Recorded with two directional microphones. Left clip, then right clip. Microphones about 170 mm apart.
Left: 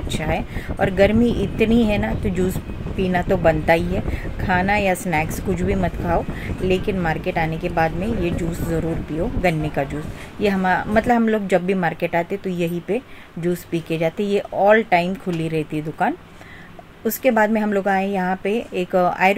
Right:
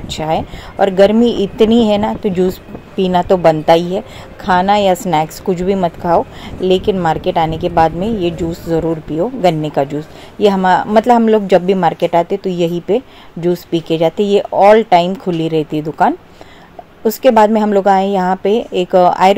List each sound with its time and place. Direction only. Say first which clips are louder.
0.1 s a woman's voice: right 8 dB; 20° right (ahead or behind)